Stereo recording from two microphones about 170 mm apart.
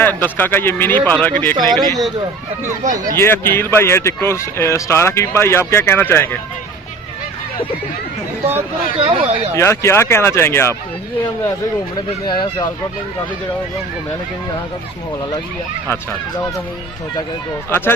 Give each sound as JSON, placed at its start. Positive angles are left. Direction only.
{"t": 0.0, "sound": "speech", "side_deg": 10}
{"t": 1.5, "sound": "speech", "side_deg": -25}
{"t": 2.8, "sound": "speech", "side_deg": -50}
{"t": 3.2, "sound": "speech", "side_deg": 15}
{"t": 9.0, "sound": "speech", "side_deg": -35}
{"t": 9.6, "sound": "speech", "side_deg": 15}
{"t": 12.2, "sound": "speech", "side_deg": 25}
{"t": 17.7, "sound": "speech", "side_deg": 15}